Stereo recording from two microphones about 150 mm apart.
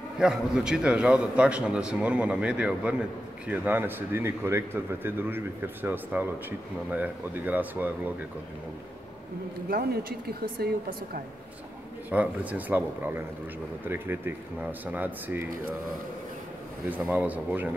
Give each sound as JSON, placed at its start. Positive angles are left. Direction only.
{"t": 0.2, "sound": "speech", "side_deg": -5}
{"t": 9.7, "sound": "a woman's voice", "side_deg": -85}
{"t": 12.1, "sound": "speech", "side_deg": -10}
{"t": 16.9, "sound": "speech", "side_deg": -10}